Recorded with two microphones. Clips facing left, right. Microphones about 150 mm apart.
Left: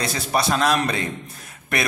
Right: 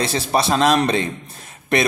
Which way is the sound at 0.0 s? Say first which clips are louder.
Right 3 dB; 25° right (ahead or behind).